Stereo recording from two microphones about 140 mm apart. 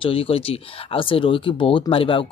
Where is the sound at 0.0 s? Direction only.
40° left (ahead or behind).